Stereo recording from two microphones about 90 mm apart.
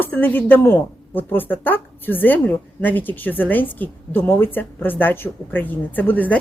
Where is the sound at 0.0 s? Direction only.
20° left (ahead or behind).